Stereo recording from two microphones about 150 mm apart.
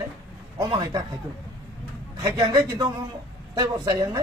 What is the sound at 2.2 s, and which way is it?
A man's voice, 25° right (ahead or behind).